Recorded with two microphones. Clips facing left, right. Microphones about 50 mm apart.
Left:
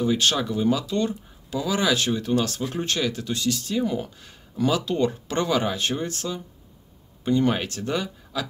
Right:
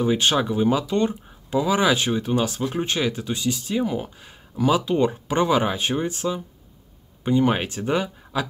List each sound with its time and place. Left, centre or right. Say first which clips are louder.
0.0 s speech: right 2 dB; right